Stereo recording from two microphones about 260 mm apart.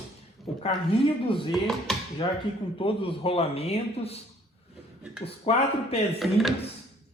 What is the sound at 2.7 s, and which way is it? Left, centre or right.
A man's voice, left.